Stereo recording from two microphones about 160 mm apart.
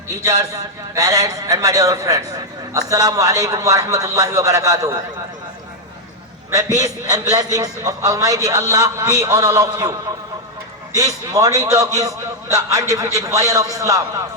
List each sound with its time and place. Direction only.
0.2 s a man's voice: 20° right (ahead or behind)
6.7 s a man's voice: 20° right (ahead or behind)
10.9 s a man's voice: 20° right (ahead or behind)